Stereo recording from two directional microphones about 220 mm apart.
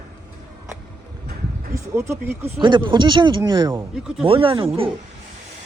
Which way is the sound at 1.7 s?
10° right (ahead or behind).